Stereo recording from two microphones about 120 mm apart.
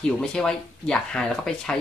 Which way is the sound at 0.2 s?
5° left (ahead or behind).